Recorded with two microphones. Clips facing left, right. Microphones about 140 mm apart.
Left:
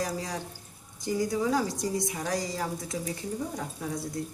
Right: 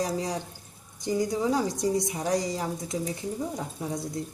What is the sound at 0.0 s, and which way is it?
Speech, 20° right (ahead or behind).